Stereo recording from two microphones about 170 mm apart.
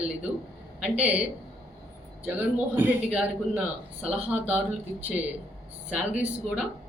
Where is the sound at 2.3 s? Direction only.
10° right (ahead or behind).